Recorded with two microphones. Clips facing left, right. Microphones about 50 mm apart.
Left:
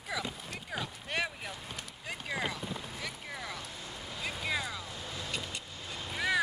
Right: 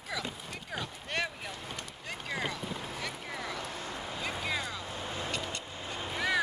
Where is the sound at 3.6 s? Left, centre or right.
Right.